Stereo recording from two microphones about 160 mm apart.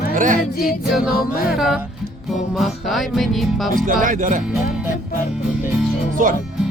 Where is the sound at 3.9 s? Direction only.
55° right (ahead or behind).